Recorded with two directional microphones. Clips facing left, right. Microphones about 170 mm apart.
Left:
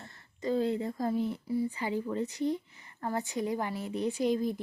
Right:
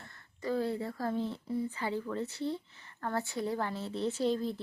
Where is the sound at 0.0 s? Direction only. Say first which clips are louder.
Left 3 dB; 20° left (ahead or behind).